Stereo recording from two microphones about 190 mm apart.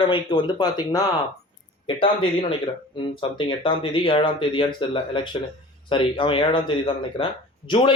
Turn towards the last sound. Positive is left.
turn(degrees=25)  # may be behind; listen again after turning